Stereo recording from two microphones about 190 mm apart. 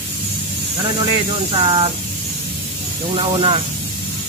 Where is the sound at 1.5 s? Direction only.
25° right (ahead or behind).